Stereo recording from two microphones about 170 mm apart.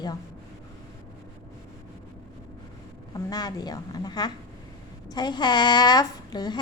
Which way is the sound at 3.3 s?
20° left (ahead or behind).